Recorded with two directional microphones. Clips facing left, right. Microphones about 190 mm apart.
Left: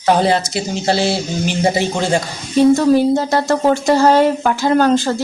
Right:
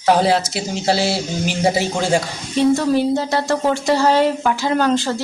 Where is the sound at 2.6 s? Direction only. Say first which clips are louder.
Left 4 dB; 45° left (ahead or behind).